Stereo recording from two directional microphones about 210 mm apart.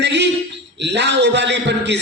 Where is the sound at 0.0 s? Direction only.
55° right (ahead or behind).